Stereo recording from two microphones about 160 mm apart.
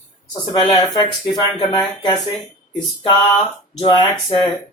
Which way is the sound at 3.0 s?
30° left (ahead or behind).